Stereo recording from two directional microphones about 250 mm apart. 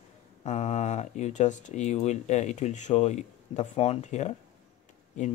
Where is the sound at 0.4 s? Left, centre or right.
Left.